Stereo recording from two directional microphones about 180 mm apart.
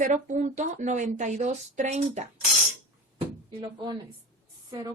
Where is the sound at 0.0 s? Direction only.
45° right (ahead or behind).